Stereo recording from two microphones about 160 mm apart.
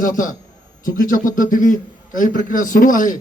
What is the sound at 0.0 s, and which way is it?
A man's voice, 55° left (ahead or behind).